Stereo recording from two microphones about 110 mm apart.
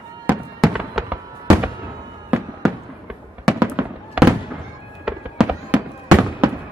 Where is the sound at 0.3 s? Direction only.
15° right (ahead or behind).